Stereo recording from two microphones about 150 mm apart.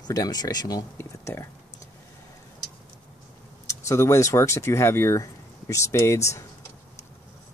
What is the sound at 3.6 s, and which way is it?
Speech, 20° left (ahead or behind).